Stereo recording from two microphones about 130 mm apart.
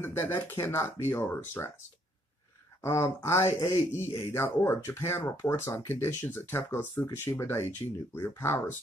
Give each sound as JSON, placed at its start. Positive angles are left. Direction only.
{"t": 0.0, "sound": "speech", "side_deg": 15}
{"t": 2.8, "sound": "speech", "side_deg": 20}